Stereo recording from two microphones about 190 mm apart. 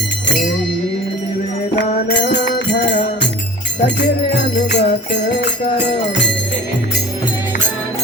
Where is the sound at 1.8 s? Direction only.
65° left (ahead or behind).